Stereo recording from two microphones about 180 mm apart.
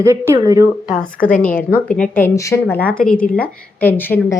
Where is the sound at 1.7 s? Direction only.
5° left (ahead or behind).